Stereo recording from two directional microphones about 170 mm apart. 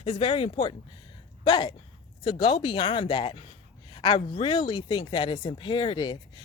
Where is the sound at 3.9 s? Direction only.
30° left (ahead or behind).